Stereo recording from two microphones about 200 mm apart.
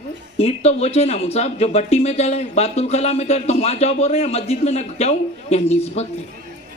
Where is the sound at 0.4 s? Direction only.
30° left (ahead or behind).